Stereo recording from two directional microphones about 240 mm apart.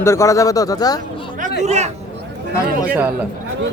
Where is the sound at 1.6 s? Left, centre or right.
Right.